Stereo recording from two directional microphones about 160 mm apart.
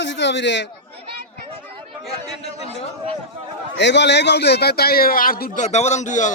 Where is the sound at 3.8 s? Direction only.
90° left; by 5.6 s 60° left (ahead or behind).